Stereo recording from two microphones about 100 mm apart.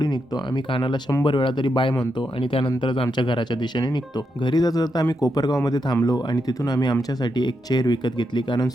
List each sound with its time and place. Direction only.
0.0 s speech: 50° left (ahead or behind)